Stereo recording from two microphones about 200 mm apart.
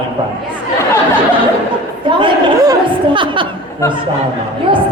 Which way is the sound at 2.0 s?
25° right (ahead or behind).